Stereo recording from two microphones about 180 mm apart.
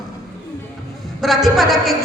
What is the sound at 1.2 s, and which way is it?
Speech, centre (ahead or behind).